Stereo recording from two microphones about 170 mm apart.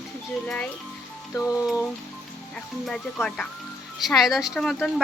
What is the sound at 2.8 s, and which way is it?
Speech, 5° left (ahead or behind).